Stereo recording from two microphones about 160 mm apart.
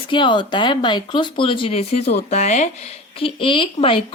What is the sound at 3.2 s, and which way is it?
Speech, 35° left (ahead or behind).